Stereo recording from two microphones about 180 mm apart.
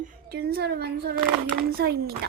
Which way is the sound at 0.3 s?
60° right (ahead or behind).